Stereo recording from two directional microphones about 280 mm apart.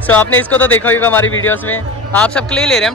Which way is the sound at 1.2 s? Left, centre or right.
Left.